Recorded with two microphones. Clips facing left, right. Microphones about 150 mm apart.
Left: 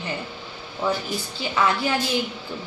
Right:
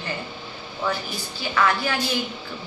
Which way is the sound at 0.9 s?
20° left (ahead or behind).